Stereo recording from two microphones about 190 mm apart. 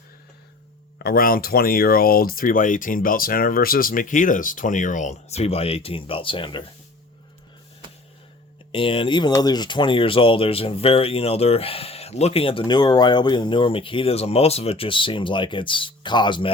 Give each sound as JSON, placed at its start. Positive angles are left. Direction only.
{"t": 0.9, "sound": "speech", "side_deg": 50}
{"t": 8.7, "sound": "speech", "side_deg": 25}